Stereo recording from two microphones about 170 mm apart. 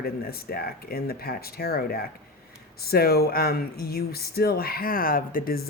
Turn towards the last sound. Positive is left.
turn(degrees=55)  # may be behind; listen again after turning